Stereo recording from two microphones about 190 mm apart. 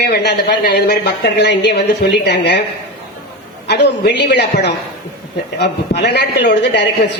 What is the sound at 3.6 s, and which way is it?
Speech, 60° left (ahead or behind).